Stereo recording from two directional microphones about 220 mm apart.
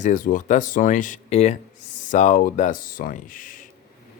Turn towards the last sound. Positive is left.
turn(degrees=40)  # may be behind; listen again after turning